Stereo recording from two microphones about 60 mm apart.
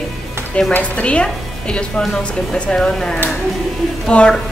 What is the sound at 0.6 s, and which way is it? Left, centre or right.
A woman's voice, left.